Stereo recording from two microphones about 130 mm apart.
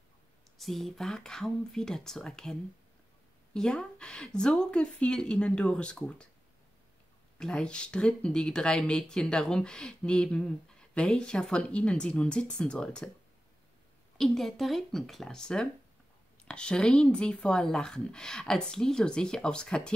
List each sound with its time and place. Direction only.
0.6 s speech: centre (ahead or behind)
3.5 s speech: 5° left (ahead or behind)
7.3 s speech: 5° left (ahead or behind)
14.1 s speech: centre (ahead or behind)